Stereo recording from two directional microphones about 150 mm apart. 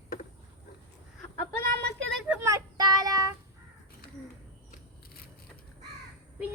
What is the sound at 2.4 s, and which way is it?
Child singing, 25° right (ahead or behind).